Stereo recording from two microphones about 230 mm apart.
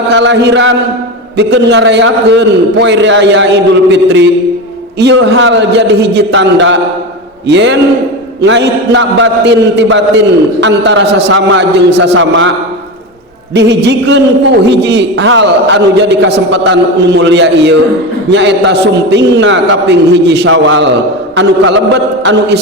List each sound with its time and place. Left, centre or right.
0.1 s chant: right
1.4 s a man's voice: right
13.5 s a man's voice: right